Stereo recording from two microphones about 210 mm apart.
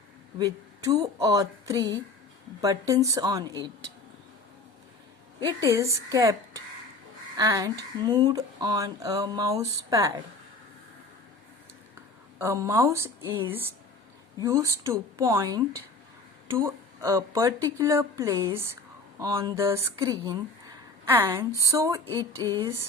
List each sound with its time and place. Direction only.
0.3 s speech: 15° right (ahead or behind)
5.5 s speech: 15° right (ahead or behind)
12.4 s a woman's voice: 15° right (ahead or behind)